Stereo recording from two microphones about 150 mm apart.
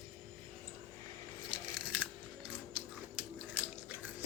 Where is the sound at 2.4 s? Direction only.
10° right (ahead or behind).